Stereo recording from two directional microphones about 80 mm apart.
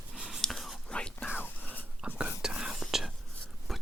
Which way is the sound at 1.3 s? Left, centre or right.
Left.